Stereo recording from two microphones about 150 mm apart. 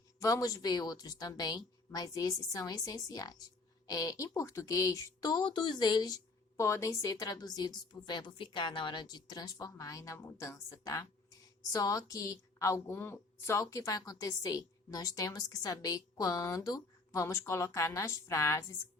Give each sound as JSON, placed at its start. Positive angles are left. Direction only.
{"t": 0.2, "sound": "a woman's voice", "side_deg": 20}